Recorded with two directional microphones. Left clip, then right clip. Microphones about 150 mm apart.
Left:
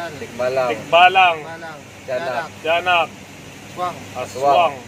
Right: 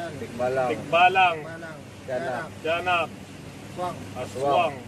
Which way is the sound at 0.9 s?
15° right (ahead or behind).